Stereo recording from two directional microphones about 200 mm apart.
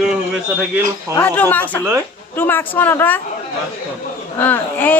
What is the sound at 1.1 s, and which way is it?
A woman's voice, 10° left (ahead or behind).